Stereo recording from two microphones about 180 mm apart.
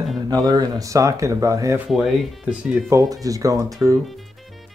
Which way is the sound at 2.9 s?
20° right (ahead or behind).